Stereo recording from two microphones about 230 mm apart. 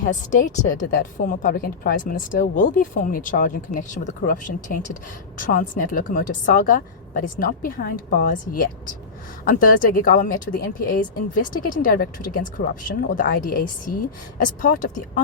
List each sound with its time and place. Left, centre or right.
0.0 s a woman's voice: left